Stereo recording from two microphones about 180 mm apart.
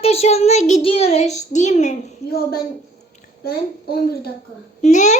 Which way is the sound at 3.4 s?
55° left (ahead or behind).